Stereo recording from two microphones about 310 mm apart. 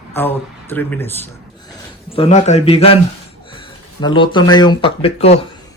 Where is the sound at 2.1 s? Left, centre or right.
Centre.